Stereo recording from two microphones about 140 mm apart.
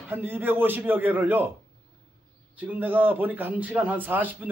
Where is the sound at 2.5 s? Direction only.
10° right (ahead or behind).